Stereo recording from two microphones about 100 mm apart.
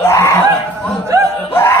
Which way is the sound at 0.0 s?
25° left (ahead or behind).